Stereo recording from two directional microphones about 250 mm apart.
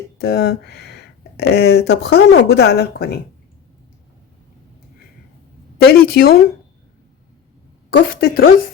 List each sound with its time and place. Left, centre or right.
0.2 s speech: left
5.7 s a woman's voice: left
7.9 s speech: left